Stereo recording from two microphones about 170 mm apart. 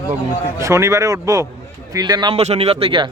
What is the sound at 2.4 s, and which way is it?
Speech, 40° right (ahead or behind).